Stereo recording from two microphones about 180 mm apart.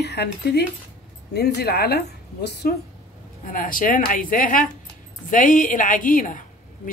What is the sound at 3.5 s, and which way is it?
A woman's voice, 50° left (ahead or behind).